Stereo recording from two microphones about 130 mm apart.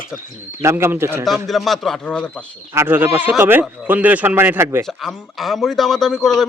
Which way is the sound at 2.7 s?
15° right (ahead or behind).